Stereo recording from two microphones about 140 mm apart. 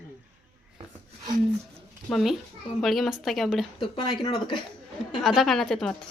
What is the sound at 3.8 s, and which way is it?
Speech, 35° left (ahead or behind).